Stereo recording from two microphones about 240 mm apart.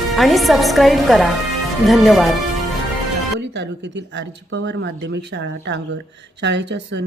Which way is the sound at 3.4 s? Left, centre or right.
Right.